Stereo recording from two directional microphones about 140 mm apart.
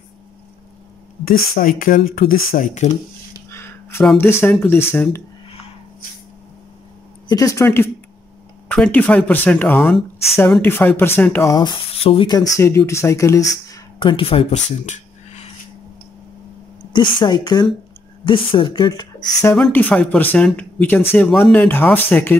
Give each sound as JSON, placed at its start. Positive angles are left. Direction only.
{"t": 1.2, "sound": "speech", "side_deg": 85}
{"t": 3.4, "sound": "a sound", "side_deg": 20}
{"t": 4.2, "sound": "speech", "side_deg": 15}
{"t": 7.2, "sound": "speech", "side_deg": 25}
{"t": 8.6, "sound": "speech", "side_deg": 10}
{"t": 10.6, "sound": "speech", "side_deg": 15}
{"t": 11.5, "sound": "a woman's voice", "side_deg": 35}
{"t": 12.3, "sound": "speech", "side_deg": 25}
{"t": 13.9, "sound": "a woman's voice", "side_deg": 35}
{"t": 16.9, "sound": "a woman's voice", "side_deg": 35}
{"t": 19.5, "sound": "speech", "side_deg": 10}